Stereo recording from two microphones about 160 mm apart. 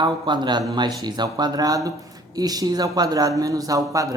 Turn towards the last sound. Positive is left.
turn(degrees=-20)  # may be behind; listen again after turning